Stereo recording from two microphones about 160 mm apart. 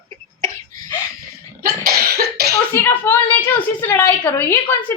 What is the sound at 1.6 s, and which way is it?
Cough, 65° right (ahead or behind).